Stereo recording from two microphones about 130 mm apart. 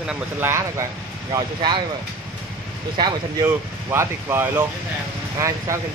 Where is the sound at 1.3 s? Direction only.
35° right (ahead or behind).